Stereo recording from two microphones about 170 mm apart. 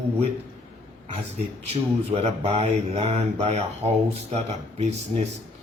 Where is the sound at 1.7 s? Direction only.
35° right (ahead or behind).